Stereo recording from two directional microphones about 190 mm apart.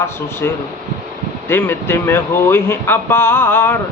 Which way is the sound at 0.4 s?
10° left (ahead or behind).